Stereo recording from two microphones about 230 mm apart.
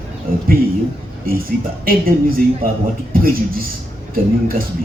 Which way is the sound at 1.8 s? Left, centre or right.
Right.